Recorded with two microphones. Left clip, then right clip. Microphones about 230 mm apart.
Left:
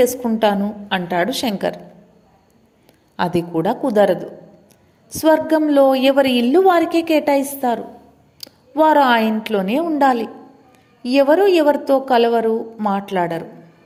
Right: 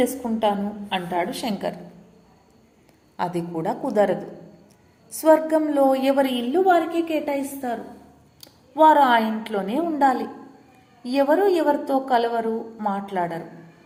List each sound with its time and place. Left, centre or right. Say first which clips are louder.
0.0 s a woman's voice: left 6 dB; left
3.2 s a woman's voice: left 7 dB; left
5.2 s a woman's voice: left 3 dB; left